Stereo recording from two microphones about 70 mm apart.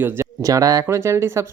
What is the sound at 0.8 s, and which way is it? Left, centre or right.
Speech, right.